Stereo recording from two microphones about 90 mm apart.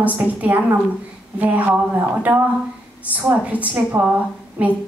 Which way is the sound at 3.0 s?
15° right (ahead or behind).